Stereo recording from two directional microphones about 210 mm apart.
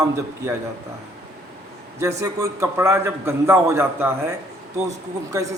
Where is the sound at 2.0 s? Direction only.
15° right (ahead or behind).